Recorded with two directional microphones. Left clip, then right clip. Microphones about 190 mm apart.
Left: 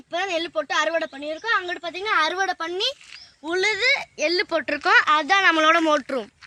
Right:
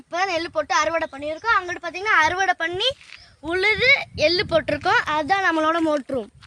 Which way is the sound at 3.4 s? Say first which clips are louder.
Right 2 dB; 60° right (ahead or behind).